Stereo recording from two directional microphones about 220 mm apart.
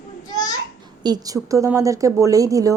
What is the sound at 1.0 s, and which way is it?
A woman's voice, 15° right (ahead or behind).